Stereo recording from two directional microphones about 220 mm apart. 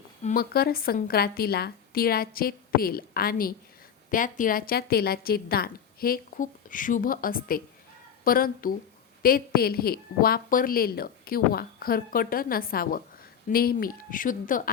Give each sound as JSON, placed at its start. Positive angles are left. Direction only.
{"t": 0.2, "sound": "a woman's voice", "side_deg": 35}